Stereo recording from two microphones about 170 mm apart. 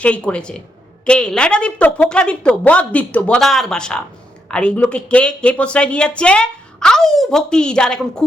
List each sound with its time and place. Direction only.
0.0 s a woman's voice: 5° left (ahead or behind)